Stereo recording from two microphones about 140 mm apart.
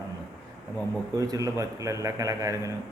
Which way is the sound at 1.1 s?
25° right (ahead or behind).